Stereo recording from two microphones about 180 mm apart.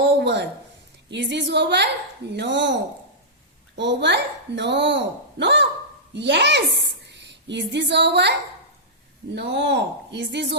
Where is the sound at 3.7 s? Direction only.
75° right (ahead or behind).